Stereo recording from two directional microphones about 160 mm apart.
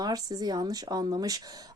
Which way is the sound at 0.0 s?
25° right (ahead or behind).